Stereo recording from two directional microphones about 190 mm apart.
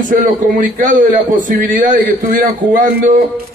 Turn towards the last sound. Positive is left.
turn(degrees=-45)  # may be behind; listen again after turning